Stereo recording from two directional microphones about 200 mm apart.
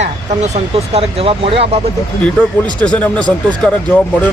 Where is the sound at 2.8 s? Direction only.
5° left (ahead or behind).